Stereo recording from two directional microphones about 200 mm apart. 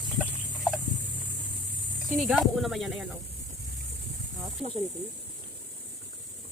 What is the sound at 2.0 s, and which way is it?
Speech, centre (ahead or behind).